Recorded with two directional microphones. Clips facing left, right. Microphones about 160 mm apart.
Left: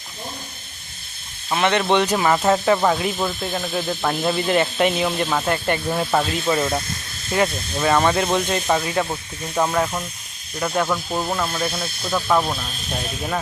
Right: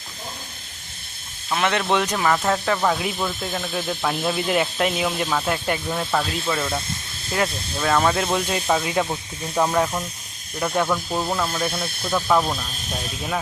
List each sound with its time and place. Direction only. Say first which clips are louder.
1.5 s speech: left 3 dB; centre (ahead or behind)
5.9 s speech: left 4 dB; 15° left (ahead or behind)
7.3 s speech: left 3 dB; 5° left (ahead or behind)
8.8 s speech: even; 15° right (ahead or behind)
9.6 s speech: even; centre (ahead or behind)